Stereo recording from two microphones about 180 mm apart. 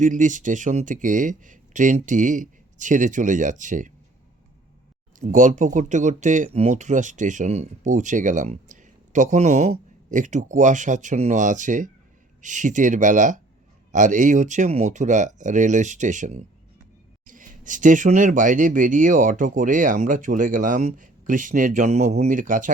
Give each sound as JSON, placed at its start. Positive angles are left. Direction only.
{"t": 0.0, "sound": "speech", "side_deg": -45}
{"t": 5.2, "sound": "speech", "side_deg": -45}